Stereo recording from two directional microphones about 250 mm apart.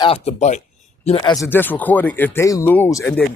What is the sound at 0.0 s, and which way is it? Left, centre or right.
Speech, left.